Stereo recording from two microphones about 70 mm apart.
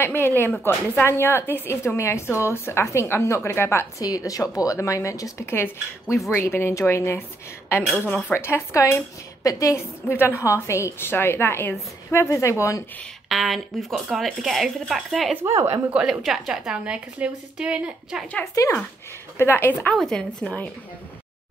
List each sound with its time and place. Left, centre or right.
0.0 s a woman's voice: left
4.0 s a woman's voice: left
5.4 s a woman's voice: left
8.3 s speech: left
10.0 s a woman's voice: left
13.3 s speech: centre
15.4 s speech: right
16.1 s speech: centre
16.7 s speech: centre
18.5 s speech: left
19.3 s a woman's voice: left
20.0 s speech: centre
20.4 s speech: left